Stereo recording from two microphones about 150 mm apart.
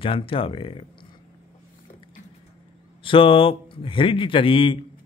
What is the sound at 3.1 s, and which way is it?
A man's voice, 35° left (ahead or behind).